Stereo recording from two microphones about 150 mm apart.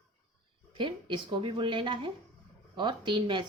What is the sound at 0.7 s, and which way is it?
Speech, 35° right (ahead or behind).